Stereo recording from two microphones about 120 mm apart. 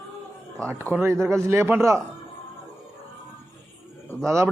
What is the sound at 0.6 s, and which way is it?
Speech, 25° right (ahead or behind).